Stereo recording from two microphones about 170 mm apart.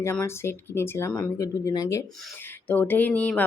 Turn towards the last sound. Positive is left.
turn(degrees=10)  # may be behind; listen again after turning